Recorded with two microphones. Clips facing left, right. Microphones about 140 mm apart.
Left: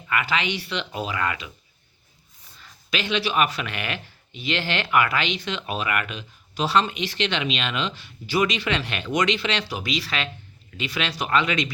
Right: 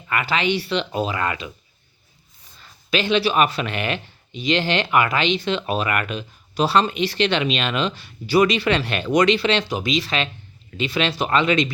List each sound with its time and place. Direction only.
0.1 s speech: 35° right (ahead or behind)
2.6 s speech: 30° right (ahead or behind)